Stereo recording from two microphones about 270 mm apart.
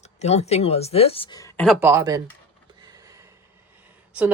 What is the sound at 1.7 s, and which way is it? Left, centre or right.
Speech, centre.